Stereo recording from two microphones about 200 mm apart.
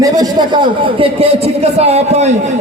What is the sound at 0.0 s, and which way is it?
Speech, 20° right (ahead or behind).